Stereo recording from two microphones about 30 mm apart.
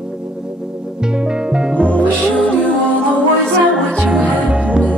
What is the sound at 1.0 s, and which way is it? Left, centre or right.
Music, right.